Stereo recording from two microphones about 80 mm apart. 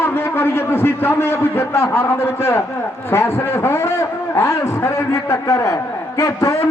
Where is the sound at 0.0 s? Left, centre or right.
Left.